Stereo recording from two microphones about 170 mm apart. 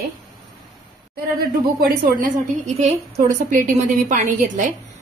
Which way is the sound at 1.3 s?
55° right (ahead or behind).